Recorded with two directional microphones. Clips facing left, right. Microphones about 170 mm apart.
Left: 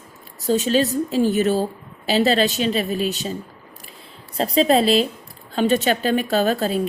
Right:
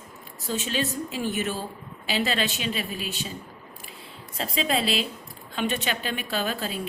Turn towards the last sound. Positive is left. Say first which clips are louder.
# left 10 dB
turn(degrees=40)  # may be behind; listen again after turning